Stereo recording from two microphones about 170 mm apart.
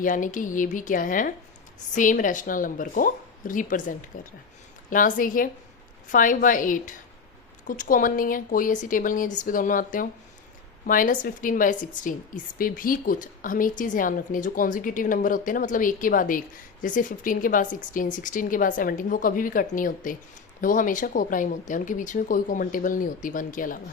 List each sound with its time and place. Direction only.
0.0 s a woman's voice: 50° left (ahead or behind)